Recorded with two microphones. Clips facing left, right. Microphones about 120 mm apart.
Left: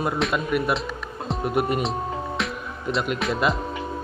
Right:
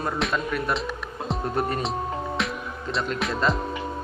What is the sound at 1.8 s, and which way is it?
Music, centre (ahead or behind).